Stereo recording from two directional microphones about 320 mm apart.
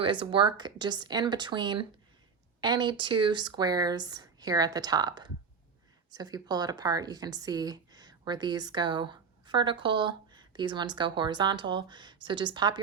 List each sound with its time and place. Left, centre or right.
0.0 s a woman's voice: centre